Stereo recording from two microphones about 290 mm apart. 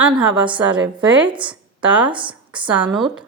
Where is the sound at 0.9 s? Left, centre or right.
Centre.